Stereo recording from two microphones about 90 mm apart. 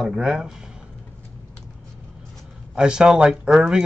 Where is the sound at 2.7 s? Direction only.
10° right (ahead or behind).